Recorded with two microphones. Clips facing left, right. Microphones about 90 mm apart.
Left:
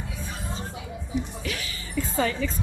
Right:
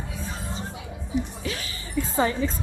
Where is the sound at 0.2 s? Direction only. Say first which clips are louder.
Right 1 dB; 20° right (ahead or behind).